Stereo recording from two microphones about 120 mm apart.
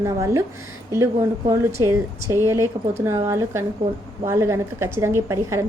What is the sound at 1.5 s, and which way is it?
A woman's voice, 25° right (ahead or behind).